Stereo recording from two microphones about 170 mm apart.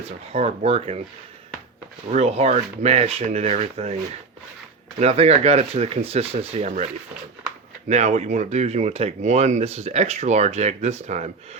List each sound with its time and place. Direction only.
0.3 s speech: 40° right (ahead or behind)
2.0 s speech: 40° right (ahead or behind)
4.9 s speech: 40° right (ahead or behind)
7.9 s speech: 45° right (ahead or behind)